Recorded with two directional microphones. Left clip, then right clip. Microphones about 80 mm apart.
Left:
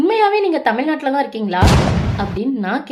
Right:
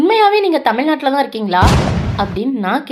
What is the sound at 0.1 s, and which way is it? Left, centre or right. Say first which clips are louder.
A woman's voice: right 3 dB; centre.